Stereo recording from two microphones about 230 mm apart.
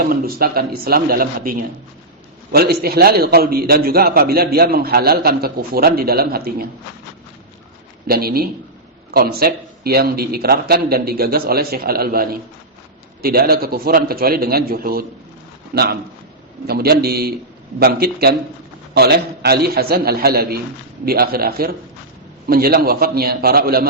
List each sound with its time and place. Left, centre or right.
0.0 s a man's voice: right
8.0 s a man's voice: right